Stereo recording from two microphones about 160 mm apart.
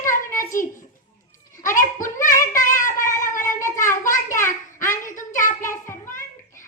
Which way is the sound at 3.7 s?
55° left (ahead or behind).